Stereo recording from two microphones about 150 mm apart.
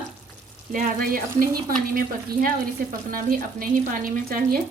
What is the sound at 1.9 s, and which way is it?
Speech, 70° right (ahead or behind).